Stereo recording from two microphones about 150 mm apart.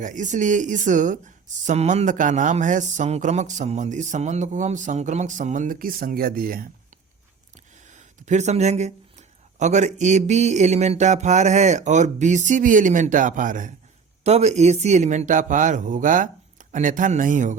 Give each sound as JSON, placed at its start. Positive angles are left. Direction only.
{"t": 0.0, "sound": "speech", "side_deg": -55}
{"t": 7.9, "sound": "speech", "side_deg": -50}
{"t": 14.3, "sound": "speech", "side_deg": -45}